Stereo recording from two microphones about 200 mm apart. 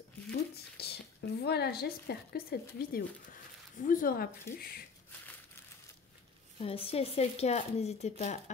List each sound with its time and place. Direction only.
0.3 s a sound: 55° left (ahead or behind)
2.9 s speech: 40° left (ahead or behind)
6.6 s speech: 30° left (ahead or behind)